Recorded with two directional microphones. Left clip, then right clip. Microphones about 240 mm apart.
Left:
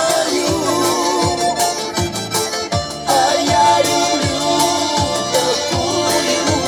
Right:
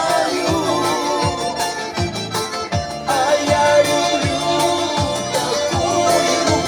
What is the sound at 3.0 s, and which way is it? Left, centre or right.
Music, left.